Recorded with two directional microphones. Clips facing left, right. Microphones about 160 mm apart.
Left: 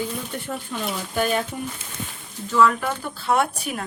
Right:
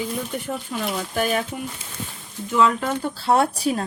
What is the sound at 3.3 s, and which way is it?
Speech, 35° right (ahead or behind).